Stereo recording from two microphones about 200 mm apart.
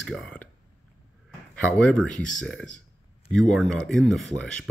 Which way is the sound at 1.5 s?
5° left (ahead or behind).